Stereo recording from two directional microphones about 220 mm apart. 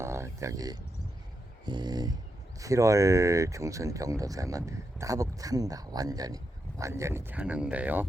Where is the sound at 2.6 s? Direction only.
15° right (ahead or behind).